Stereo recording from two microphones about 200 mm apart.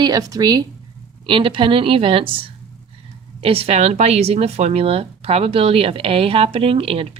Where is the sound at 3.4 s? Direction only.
30° right (ahead or behind).